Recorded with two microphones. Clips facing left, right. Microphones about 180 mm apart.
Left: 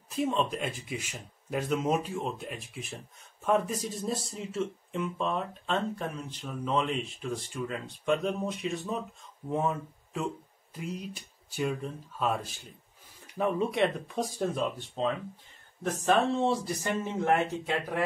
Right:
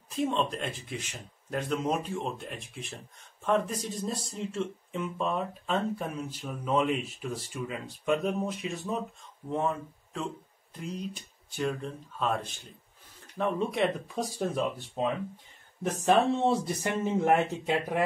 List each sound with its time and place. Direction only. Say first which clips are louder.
0.1 s speech: even; centre (ahead or behind)
17.2 s speech: right 1 dB; 20° right (ahead or behind)